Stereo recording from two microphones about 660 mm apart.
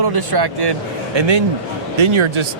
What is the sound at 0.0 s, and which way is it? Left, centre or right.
Speech, right.